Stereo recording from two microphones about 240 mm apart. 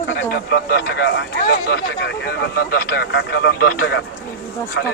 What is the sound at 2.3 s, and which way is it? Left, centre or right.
Speech, left.